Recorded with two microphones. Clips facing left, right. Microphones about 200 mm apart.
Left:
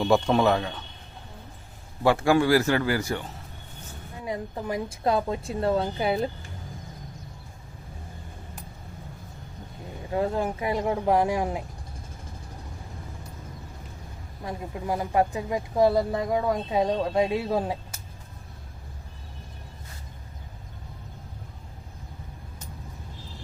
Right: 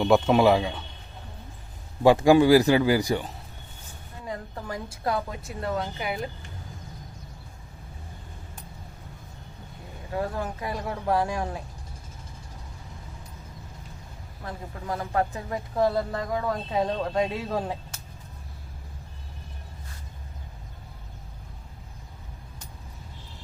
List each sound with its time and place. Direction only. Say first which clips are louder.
0.0 s speech: right 2 dB; 5° right (ahead or behind)
2.0 s speech: right 4 dB; 15° right (ahead or behind)
4.3 s a woman's voice: left 4 dB; 20° left (ahead or behind)
10.1 s speech: left 4 dB; 25° left (ahead or behind)
14.4 s speech: left 4 dB; 15° left (ahead or behind)